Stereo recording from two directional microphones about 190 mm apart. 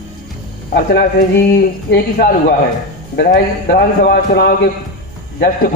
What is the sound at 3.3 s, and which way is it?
A man's voice, 55° left (ahead or behind).